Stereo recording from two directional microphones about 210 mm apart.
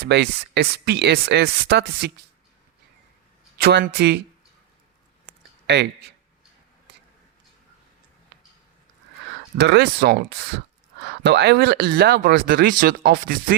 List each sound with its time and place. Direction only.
0.1 s speech: 55° right (ahead or behind)
3.6 s speech: 50° right (ahead or behind)
5.6 s speech: 50° right (ahead or behind)
8.3 s a sound: 50° right (ahead or behind)
9.6 s speech: 55° right (ahead or behind)